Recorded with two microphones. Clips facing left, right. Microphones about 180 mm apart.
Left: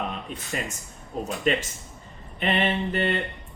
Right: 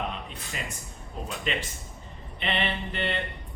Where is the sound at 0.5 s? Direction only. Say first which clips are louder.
Left 6 dB; 45° left (ahead or behind).